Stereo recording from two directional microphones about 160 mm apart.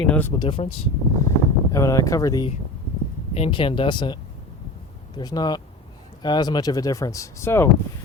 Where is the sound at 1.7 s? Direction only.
20° left (ahead or behind).